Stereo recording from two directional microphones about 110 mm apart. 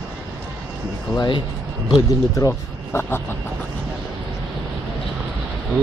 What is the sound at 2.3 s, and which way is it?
Speech, 25° left (ahead or behind).